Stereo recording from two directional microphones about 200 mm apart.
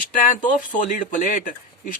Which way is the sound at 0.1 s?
40° left (ahead or behind).